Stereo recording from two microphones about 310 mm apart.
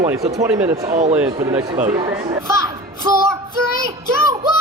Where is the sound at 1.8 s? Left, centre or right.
Centre.